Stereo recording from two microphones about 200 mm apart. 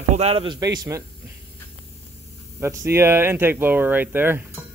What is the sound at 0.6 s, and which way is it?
Speech, 20° right (ahead or behind).